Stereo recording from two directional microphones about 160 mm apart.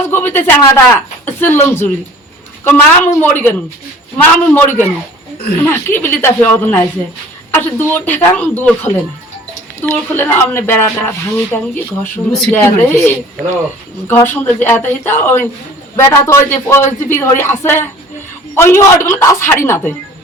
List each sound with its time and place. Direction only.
0.0 s speech: 10° left (ahead or behind)